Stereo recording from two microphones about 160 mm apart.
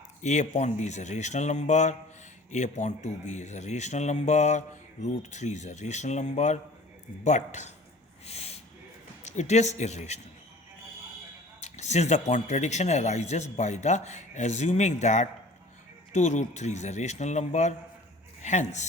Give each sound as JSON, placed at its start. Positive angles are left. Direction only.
{"t": 0.2, "sound": "speech", "side_deg": 45}
{"t": 8.3, "sound": "a sound", "side_deg": 40}
{"t": 9.2, "sound": "speech", "side_deg": 45}
{"t": 11.6, "sound": "speech", "side_deg": 45}